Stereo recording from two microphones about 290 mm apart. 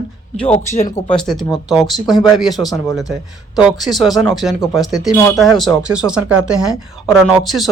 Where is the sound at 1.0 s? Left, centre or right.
Centre.